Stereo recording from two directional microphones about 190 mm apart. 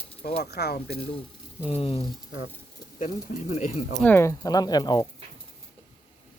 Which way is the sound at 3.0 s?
45° left (ahead or behind).